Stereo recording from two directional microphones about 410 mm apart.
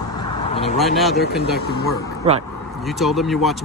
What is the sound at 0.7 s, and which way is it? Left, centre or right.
Speech, centre.